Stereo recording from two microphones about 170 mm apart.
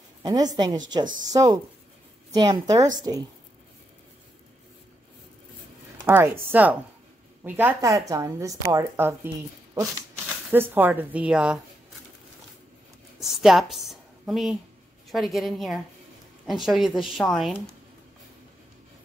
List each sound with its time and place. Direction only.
0.2 s speech: 25° right (ahead or behind)
6.0 s a woman's voice: 10° right (ahead or behind)
10.5 s a woman's voice: 10° right (ahead or behind)
13.2 s speech: centre (ahead or behind)